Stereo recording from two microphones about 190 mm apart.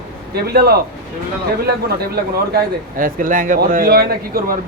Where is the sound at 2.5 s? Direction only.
45° right (ahead or behind).